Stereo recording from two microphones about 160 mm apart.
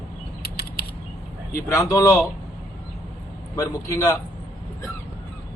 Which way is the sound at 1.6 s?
20° left (ahead or behind).